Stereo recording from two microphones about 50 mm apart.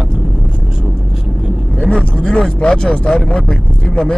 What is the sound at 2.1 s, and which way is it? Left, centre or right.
Speech, left.